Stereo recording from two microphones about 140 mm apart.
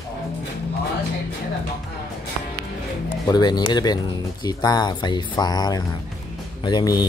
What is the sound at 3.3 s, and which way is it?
Speech, 30° left (ahead or behind).